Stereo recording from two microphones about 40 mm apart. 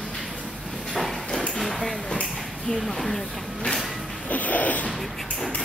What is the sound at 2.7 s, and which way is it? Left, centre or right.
Speech, centre.